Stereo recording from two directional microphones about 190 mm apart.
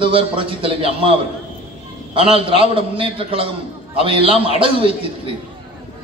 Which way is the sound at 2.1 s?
30° right (ahead or behind).